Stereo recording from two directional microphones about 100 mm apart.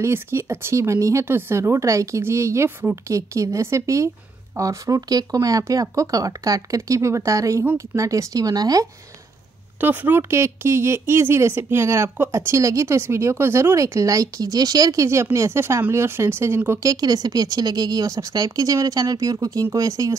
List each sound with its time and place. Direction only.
0.0 s speech: 25° right (ahead or behind)
9.8 s speech: 20° right (ahead or behind)
16.8 s speech: 40° right (ahead or behind)